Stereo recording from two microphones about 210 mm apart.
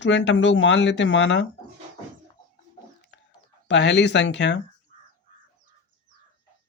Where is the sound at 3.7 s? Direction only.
55° left (ahead or behind).